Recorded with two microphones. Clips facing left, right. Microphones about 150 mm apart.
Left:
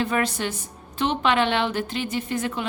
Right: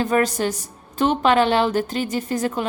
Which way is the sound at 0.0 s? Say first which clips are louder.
Right 5 dB; 40° right (ahead or behind).